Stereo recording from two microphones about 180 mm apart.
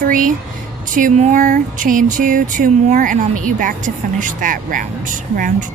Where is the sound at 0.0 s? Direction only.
50° right (ahead or behind).